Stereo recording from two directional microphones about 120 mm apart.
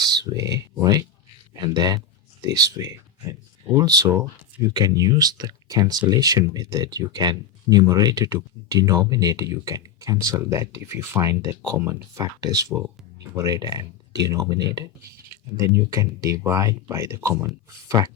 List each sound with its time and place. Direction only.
0.0 s speech: 35° right (ahead or behind)